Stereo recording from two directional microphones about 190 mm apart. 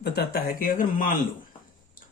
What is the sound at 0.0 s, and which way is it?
Speech, 55° left (ahead or behind).